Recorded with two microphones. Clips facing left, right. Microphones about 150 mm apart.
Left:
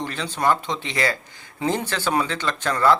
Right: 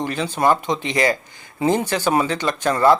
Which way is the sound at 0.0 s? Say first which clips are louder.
Right 4 dB; 10° right (ahead or behind).